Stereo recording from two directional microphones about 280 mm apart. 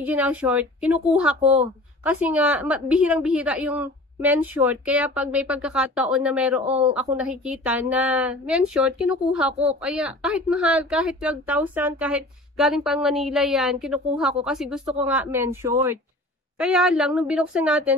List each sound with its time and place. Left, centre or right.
0.0 s a woman's voice: centre